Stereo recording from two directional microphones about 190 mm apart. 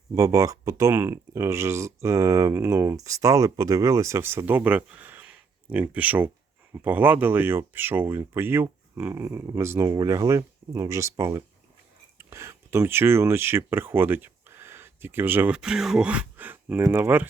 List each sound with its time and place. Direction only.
0.2 s speech: 15° right (ahead or behind)